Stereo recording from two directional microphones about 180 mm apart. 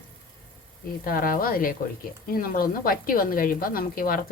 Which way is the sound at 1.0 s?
50° left (ahead or behind).